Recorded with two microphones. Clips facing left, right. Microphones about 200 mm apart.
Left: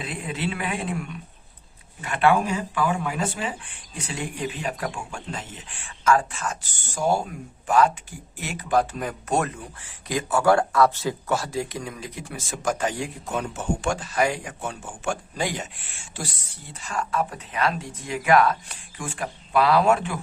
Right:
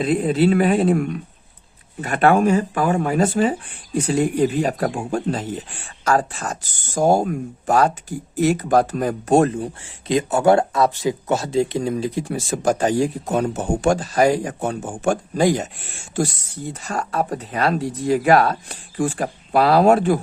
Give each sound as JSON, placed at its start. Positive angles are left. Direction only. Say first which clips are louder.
{"t": 0.0, "sound": "speech", "louder": "right 13 dB", "side_deg": -40}